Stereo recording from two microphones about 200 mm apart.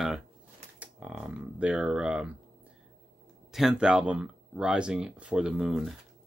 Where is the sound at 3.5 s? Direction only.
5° right (ahead or behind).